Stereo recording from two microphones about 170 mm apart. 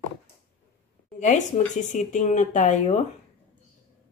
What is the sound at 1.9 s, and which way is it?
Speech, 45° left (ahead or behind).